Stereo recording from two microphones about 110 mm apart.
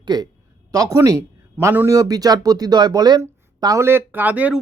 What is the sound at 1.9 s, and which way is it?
Speech, 35° right (ahead or behind).